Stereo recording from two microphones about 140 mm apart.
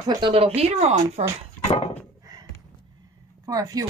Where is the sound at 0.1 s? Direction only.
40° right (ahead or behind).